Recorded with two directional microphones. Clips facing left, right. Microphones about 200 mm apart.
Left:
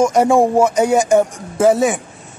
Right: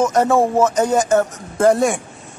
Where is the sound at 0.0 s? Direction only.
10° left (ahead or behind).